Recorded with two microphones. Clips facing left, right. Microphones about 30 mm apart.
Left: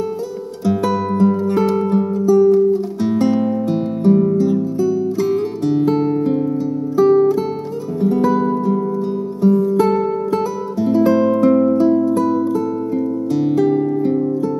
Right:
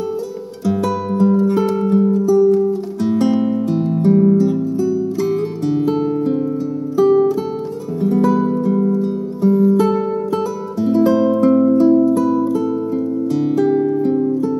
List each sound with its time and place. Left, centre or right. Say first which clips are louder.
0.7 s music: left 1 dB; centre
9.8 s music: left 1 dB; centre
11.5 s music: right 2 dB; centre